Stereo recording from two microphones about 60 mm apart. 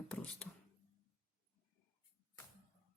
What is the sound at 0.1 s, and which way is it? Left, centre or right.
Speech, left.